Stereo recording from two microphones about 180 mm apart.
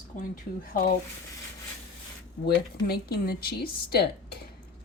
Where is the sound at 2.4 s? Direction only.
60° left (ahead or behind).